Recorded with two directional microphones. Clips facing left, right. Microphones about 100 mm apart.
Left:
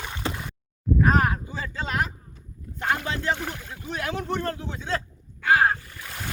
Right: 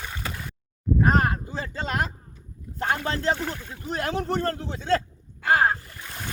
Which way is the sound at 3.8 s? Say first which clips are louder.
Right 3 dB; 40° right (ahead or behind).